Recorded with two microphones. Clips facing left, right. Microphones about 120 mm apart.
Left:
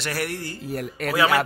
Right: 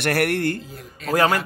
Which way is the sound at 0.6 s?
65° left (ahead or behind).